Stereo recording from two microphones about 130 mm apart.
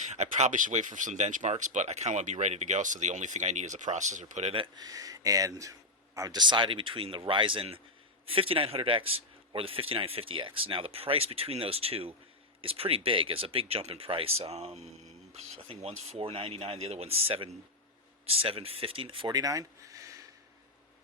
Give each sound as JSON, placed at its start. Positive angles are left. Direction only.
{"t": 0.0, "sound": "speech", "side_deg": -65}
{"t": 4.5, "sound": "speech", "side_deg": -35}
{"t": 19.3, "sound": "speech", "side_deg": -25}